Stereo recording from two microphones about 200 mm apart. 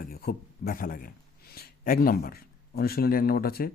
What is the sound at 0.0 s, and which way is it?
A man's voice, 50° left (ahead or behind).